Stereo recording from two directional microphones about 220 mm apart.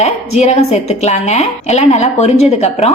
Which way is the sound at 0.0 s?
30° left (ahead or behind).